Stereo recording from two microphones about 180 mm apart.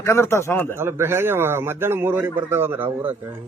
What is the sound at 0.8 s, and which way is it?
A man's voice, 15° right (ahead or behind).